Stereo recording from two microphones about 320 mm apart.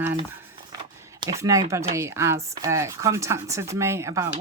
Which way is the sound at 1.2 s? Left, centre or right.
Centre.